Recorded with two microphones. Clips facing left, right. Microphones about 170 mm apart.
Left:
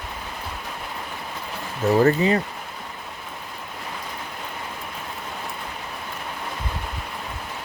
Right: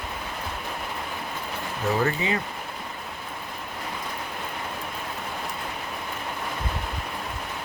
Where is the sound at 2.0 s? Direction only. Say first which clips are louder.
Left 9 dB; 40° left (ahead or behind).